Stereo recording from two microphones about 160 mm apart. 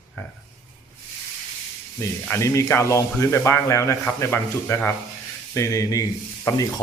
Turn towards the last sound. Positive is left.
turn(degrees=20)  # may be behind; listen again after turning